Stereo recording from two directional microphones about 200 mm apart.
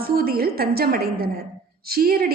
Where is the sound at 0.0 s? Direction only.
50° right (ahead or behind).